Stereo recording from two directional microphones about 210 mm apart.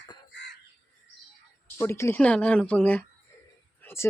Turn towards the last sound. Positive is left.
turn(degrees=10)  # may be behind; listen again after turning